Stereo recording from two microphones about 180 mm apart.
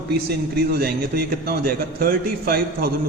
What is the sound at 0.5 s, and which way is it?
A man's voice, 60° right (ahead or behind).